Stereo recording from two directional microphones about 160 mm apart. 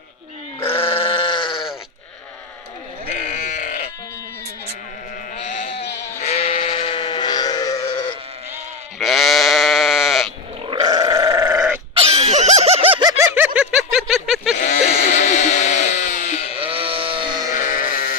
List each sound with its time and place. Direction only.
0.8 s sheep: 35° left (ahead or behind)
3.2 s sheep: 50° left (ahead or behind)
5.4 s sheep: 50° left (ahead or behind); by 7.8 s 25° left (ahead or behind)
9.0 s sheep: centre (ahead or behind)
10.7 s grunt: 25° right (ahead or behind)
11.9 s music: 40° right (ahead or behind)
13.2 s a sound: 10° right (ahead or behind)
14.5 s sheep: 45° left (ahead or behind)
16.6 s sheep: 35° right (ahead or behind)
17.6 s sheep: 60° left (ahead or behind)